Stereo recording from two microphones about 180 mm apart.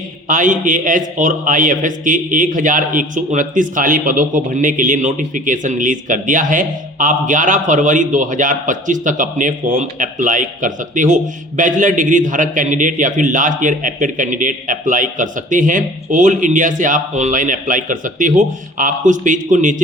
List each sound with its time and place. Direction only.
0.3 s a man's voice: 45° right (ahead or behind)